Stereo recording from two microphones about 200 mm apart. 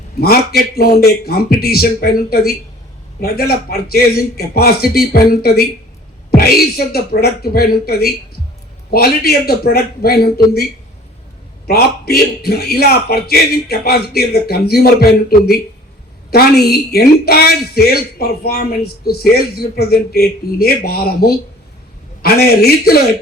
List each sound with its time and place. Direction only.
0.2 s speech: 50° left (ahead or behind)